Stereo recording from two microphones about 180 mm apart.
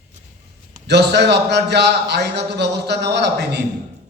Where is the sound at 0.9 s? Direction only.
70° right (ahead or behind).